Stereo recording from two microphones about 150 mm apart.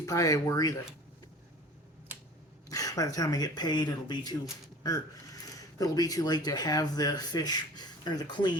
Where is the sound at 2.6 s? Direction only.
25° left (ahead or behind).